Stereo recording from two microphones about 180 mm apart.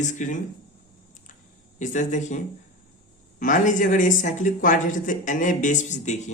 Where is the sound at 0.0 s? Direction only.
45° left (ahead or behind).